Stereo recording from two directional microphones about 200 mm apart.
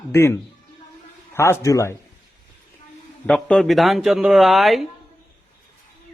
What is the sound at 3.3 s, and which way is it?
Speech, 5° left (ahead or behind).